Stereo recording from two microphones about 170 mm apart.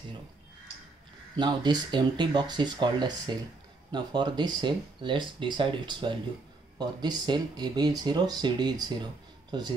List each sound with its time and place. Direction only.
1.4 s speech: 25° right (ahead or behind)